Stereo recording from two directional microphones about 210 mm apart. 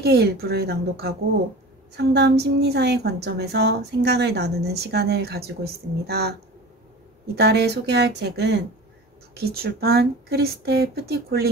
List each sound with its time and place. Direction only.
0.0 s a woman's voice: 50° right (ahead or behind)
7.3 s a woman's voice: 50° right (ahead or behind)